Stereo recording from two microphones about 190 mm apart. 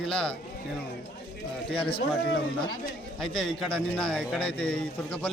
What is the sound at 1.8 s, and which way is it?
Speech, 25° left (ahead or behind).